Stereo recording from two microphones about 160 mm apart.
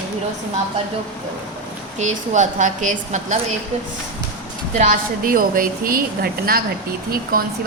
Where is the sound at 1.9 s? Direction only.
50° right (ahead or behind).